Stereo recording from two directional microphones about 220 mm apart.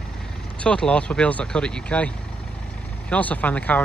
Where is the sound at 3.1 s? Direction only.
5° left (ahead or behind).